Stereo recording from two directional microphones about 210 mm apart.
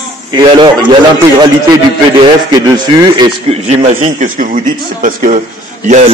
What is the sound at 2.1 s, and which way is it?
A man's voice, 20° right (ahead or behind).